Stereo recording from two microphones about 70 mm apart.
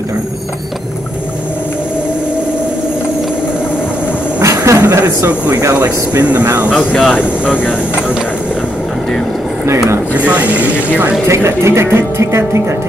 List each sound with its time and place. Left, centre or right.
4.4 s a sound: right
5.0 s speech: right
10.1 s speech: centre
11.2 s speech: right